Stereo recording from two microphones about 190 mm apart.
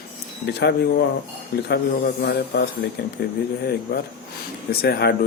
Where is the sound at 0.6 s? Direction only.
60° left (ahead or behind).